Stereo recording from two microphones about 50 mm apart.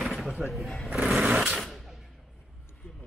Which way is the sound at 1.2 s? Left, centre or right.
Right.